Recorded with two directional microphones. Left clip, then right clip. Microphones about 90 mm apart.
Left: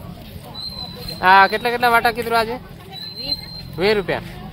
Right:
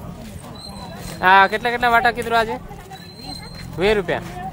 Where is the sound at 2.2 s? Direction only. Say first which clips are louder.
Even; 5° left (ahead or behind).